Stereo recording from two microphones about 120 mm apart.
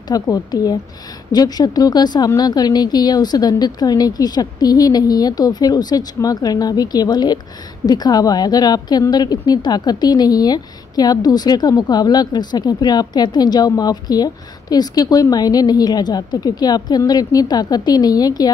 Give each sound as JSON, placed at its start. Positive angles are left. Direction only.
{"t": 0.1, "sound": "a woman's voice", "side_deg": 30}